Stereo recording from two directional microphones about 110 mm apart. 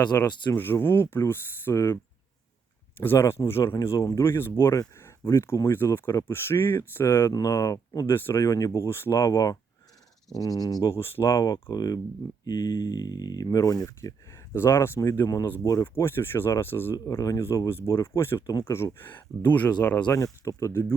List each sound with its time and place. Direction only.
0.3 s speech: 45° left (ahead or behind)
0.5 s speech: 20° left (ahead or behind)
3.0 s speech: 20° left (ahead or behind)
3.8 s speech: 30° left (ahead or behind)
8.0 s speech: 20° left (ahead or behind)
11.3 s speech: 35° left (ahead or behind); by 20.1 s 15° left (ahead or behind)
20.1 s speech: 30° left (ahead or behind)